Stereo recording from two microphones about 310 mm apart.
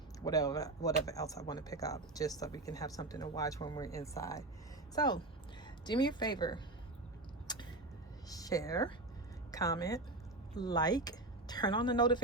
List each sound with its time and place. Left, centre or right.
0.3 s speech: centre
7.4 s a sound: centre
8.3 s a woman's voice: centre